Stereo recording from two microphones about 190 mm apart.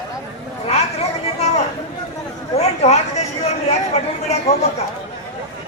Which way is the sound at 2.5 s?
35° left (ahead or behind).